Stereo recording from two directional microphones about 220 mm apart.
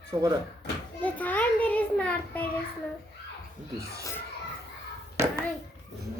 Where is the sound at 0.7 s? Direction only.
50° left (ahead or behind).